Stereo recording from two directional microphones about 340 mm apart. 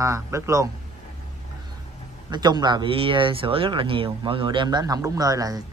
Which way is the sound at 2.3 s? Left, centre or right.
Centre.